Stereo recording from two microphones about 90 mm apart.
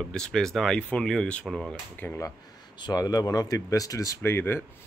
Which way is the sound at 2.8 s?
45° left (ahead or behind).